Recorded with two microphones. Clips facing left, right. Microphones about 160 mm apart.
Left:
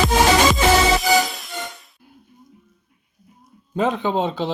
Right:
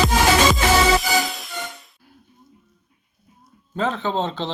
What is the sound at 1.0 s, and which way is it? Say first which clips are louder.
Music: left 4 dB; centre (ahead or behind).